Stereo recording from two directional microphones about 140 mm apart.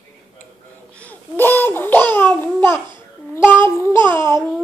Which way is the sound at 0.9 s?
10° left (ahead or behind).